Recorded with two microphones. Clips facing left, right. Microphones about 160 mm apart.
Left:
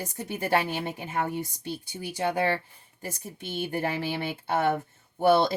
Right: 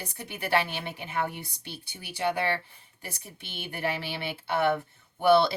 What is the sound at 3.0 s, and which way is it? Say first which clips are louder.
Speech: left 6 dB; 45° left (ahead or behind).